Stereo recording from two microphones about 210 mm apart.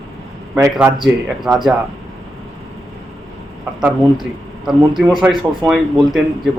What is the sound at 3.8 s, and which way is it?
A man's voice, centre (ahead or behind).